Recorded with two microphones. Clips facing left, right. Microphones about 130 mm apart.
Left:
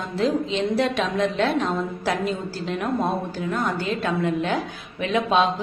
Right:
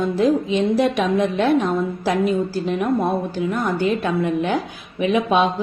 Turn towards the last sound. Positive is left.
turn(degrees=-15)  # may be behind; listen again after turning